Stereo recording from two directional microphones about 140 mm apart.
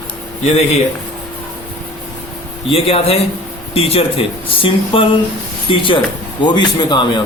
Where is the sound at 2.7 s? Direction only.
45° left (ahead or behind).